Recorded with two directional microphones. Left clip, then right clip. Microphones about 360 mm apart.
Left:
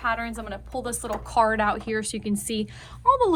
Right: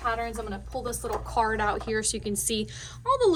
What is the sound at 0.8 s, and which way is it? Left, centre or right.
Speech, left.